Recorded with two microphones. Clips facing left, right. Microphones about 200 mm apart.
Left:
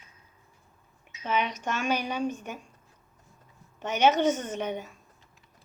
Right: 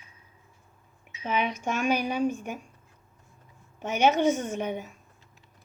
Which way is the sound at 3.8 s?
10° right (ahead or behind).